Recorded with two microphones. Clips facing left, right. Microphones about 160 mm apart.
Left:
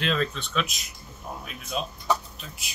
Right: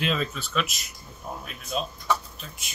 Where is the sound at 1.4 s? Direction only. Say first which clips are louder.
Right 1 dB; centre (ahead or behind).